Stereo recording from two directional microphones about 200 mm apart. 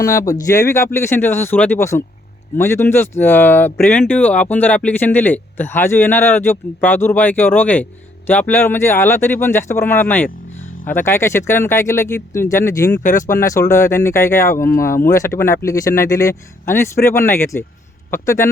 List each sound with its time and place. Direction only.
0.0 s speech: 15° left (ahead or behind)
13.0 s speech: 40° left (ahead or behind)
13.4 s speech: 15° left (ahead or behind)